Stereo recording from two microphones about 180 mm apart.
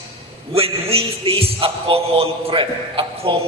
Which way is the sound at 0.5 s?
35° right (ahead or behind).